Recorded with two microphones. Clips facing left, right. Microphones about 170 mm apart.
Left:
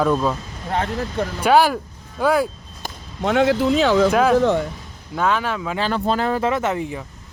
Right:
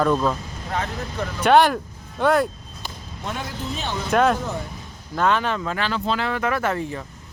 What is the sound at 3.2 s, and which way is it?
Speech, 75° left (ahead or behind).